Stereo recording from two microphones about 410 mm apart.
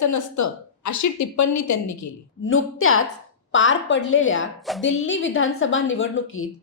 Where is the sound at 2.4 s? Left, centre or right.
Left.